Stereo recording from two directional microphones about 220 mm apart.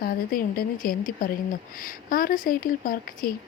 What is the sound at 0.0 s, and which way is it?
A woman's voice, 45° left (ahead or behind).